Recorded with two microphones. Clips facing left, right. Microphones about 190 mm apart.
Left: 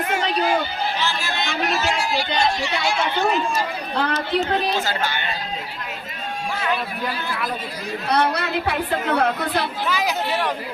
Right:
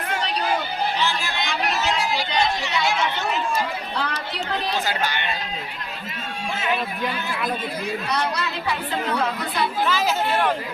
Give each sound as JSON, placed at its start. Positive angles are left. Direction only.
{"t": 1.0, "sound": "chatter", "side_deg": -15}
{"t": 2.1, "sound": "a sound", "side_deg": -20}
{"t": 3.9, "sound": "chatter", "side_deg": 55}
{"t": 8.0, "sound": "speech", "side_deg": 60}